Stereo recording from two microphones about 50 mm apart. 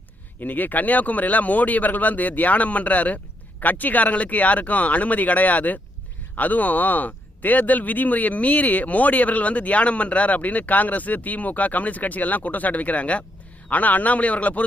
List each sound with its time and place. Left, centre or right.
0.3 s a man's voice: left